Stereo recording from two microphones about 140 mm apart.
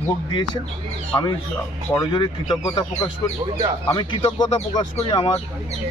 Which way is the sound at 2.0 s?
35° left (ahead or behind).